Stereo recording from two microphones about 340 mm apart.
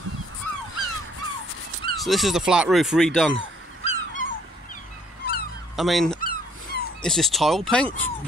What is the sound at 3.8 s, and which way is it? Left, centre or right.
Dog, left.